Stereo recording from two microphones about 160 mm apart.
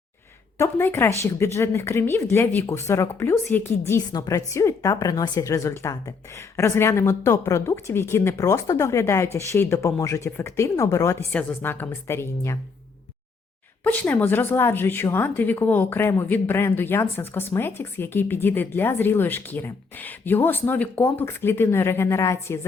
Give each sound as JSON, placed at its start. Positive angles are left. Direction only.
{"t": 0.6, "sound": "a woman's voice", "side_deg": 15}
{"t": 13.8, "sound": "a woman's voice", "side_deg": 10}